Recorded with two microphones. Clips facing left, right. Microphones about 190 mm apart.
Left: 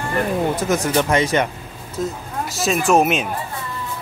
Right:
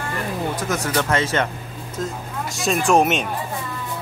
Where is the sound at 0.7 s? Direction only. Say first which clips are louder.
Left 3 dB; 20° left (ahead or behind).